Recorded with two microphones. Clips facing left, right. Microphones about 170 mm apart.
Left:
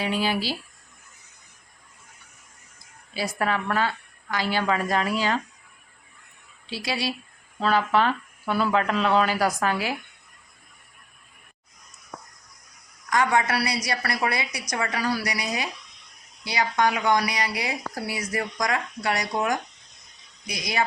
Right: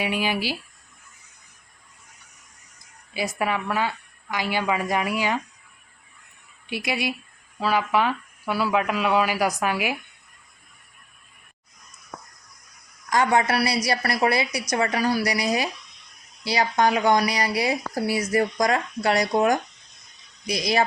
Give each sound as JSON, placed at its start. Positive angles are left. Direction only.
{"t": 0.0, "sound": "speech", "side_deg": -15}
{"t": 3.2, "sound": "speech", "side_deg": -15}
{"t": 6.7, "sound": "a woman's voice", "side_deg": -20}
{"t": 7.6, "sound": "speech", "side_deg": -10}
{"t": 13.1, "sound": "speech", "side_deg": -30}